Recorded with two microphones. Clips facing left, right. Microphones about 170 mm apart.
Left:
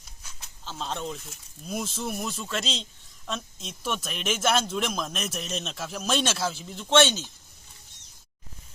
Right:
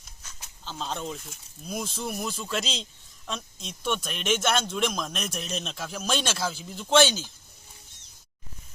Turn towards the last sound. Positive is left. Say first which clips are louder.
# even
turn(degrees=0)  # may be behind; listen again after turning